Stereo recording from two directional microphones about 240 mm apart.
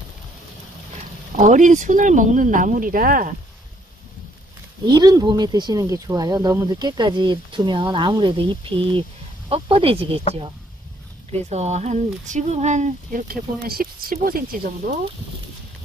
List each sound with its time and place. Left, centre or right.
1.3 s speech: right
4.8 s speech: centre
11.4 s speech: right